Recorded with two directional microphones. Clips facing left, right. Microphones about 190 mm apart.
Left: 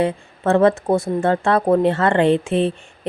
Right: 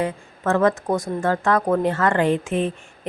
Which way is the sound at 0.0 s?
30° left (ahead or behind).